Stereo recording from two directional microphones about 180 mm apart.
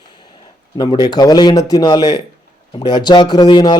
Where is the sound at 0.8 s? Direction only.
25° left (ahead or behind).